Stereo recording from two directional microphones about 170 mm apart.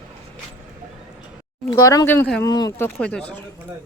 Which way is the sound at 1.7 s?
20° left (ahead or behind).